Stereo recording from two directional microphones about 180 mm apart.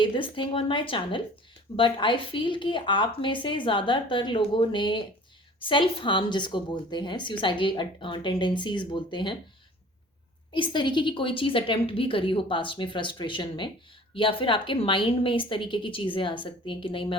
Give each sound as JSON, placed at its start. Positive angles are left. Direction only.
{"t": 0.0, "sound": "speech", "side_deg": 30}
{"t": 10.5, "sound": "speech", "side_deg": 25}